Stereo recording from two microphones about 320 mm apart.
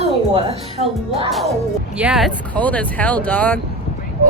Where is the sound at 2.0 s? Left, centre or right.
Centre.